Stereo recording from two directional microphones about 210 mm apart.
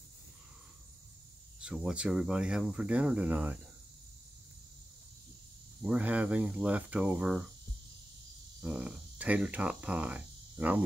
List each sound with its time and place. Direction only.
1.6 s speech: 5° right (ahead or behind)
5.8 s cricket: 5° right (ahead or behind)
8.5 s speech: 5° right (ahead or behind)